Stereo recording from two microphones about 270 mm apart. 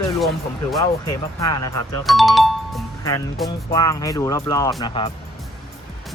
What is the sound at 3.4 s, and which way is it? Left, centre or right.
Speech, centre.